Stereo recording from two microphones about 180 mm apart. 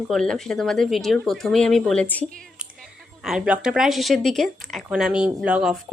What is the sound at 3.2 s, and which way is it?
A woman's voice, 5° right (ahead or behind).